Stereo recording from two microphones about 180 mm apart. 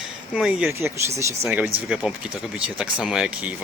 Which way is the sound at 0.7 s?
15° right (ahead or behind).